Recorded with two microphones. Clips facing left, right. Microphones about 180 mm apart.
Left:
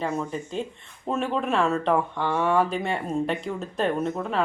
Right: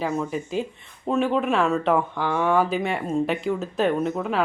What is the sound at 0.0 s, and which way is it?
Speech, 5° right (ahead or behind).